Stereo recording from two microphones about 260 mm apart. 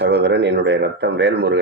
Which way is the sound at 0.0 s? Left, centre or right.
Right.